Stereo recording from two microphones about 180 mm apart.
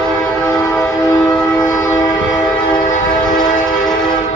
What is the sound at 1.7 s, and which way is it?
Train, 15° left (ahead or behind).